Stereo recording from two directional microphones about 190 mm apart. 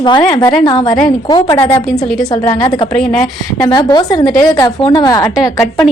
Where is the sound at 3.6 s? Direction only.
20° left (ahead or behind).